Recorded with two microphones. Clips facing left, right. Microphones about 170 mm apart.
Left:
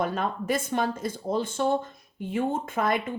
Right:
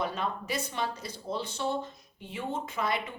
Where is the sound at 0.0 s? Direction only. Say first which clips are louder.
Left 5 dB; 50° left (ahead or behind).